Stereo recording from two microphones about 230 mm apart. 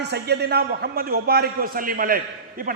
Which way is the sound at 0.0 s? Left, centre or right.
Right.